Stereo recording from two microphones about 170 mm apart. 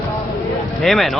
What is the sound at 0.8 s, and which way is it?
Speech, centre (ahead or behind).